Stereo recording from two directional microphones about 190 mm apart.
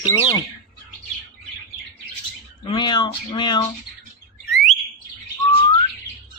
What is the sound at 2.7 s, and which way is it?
Speech, 25° left (ahead or behind).